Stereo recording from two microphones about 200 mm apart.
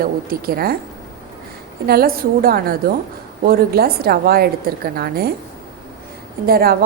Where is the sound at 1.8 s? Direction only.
50° right (ahead or behind).